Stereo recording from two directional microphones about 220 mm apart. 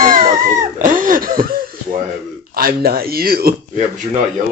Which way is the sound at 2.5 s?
45° right (ahead or behind).